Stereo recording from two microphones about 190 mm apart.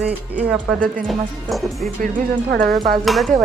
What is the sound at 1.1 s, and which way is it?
Speech, centre (ahead or behind).